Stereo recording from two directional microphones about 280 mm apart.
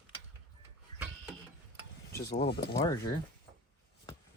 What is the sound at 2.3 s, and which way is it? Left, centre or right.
Speech, left.